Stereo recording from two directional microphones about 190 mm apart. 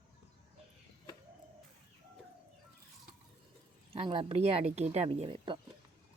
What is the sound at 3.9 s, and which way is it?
Speech, 30° right (ahead or behind).